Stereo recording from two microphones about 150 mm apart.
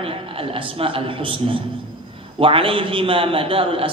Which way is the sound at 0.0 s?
40° right (ahead or behind).